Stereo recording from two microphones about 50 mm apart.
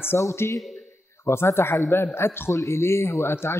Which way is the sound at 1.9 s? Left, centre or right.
Left.